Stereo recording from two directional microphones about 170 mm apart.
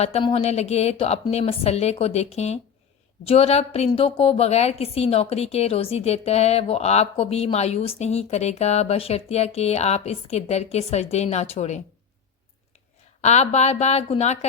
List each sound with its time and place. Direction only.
0.0 s a woman's voice: 35° left (ahead or behind)
13.2 s a woman's voice: 40° left (ahead or behind)